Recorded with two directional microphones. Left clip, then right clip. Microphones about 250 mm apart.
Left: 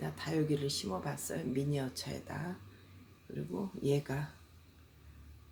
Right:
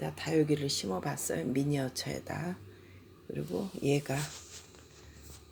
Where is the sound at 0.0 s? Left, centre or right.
Centre.